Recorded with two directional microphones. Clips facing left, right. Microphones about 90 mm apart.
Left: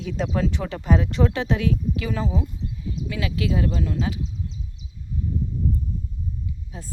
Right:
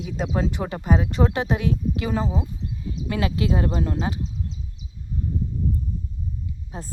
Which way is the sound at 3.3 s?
35° right (ahead or behind).